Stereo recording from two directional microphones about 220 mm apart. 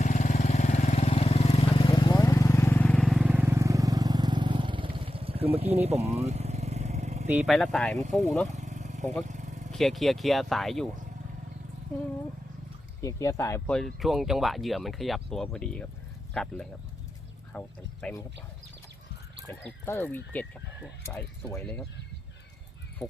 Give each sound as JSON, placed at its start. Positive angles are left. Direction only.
{"t": 0.0, "sound": "vehicle", "side_deg": 35}
{"t": 7.3, "sound": "speech", "side_deg": 0}
{"t": 8.5, "sound": "vehicle", "side_deg": -30}
{"t": 9.7, "sound": "speech", "side_deg": 0}
{"t": 13.0, "sound": "speech", "side_deg": 15}
{"t": 19.5, "sound": "speech", "side_deg": 10}